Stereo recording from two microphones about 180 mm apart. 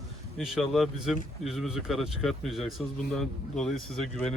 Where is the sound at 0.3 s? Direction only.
Centre (ahead or behind).